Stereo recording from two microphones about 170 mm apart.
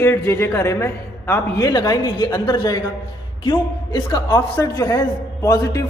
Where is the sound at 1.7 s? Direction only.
25° left (ahead or behind).